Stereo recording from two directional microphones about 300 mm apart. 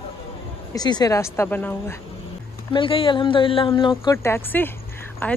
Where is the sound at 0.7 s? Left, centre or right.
Centre.